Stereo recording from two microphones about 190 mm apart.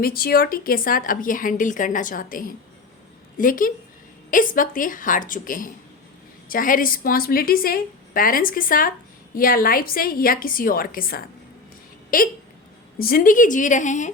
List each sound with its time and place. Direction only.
0.0 s a woman's voice: 50° left (ahead or behind)